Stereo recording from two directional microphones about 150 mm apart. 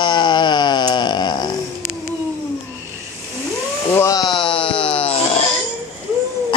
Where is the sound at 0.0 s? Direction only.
30° left (ahead or behind).